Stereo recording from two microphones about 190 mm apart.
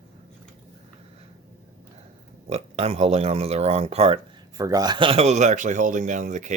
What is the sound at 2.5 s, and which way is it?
Speech, 35° right (ahead or behind).